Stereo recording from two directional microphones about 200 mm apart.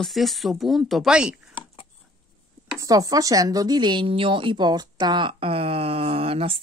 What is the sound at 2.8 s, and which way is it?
Speech, 20° right (ahead or behind).